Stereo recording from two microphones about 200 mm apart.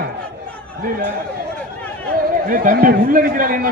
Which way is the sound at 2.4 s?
45° right (ahead or behind).